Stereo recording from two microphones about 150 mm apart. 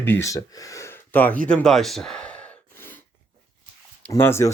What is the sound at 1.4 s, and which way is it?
Gasp, 5° left (ahead or behind).